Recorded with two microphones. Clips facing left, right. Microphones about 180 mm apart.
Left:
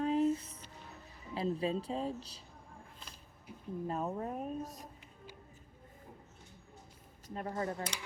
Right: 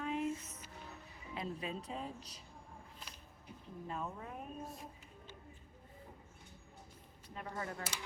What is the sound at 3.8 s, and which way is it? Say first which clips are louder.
A woman's voice: left 7 dB; 40° left (ahead or behind).